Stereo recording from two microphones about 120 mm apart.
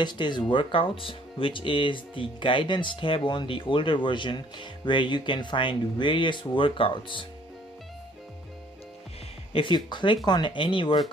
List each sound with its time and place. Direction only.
0.0 s speech: 40° left (ahead or behind)
9.5 s speech: 45° left (ahead or behind)